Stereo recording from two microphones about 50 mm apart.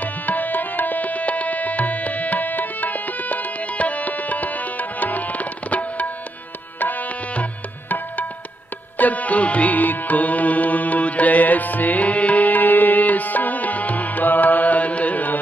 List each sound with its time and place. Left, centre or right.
0.0 s tabla: left
8.9 s music: left